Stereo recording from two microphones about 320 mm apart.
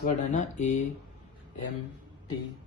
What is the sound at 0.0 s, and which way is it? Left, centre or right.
Speech, left.